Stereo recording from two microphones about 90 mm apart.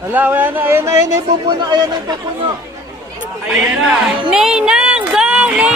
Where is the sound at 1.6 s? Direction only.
50° right (ahead or behind).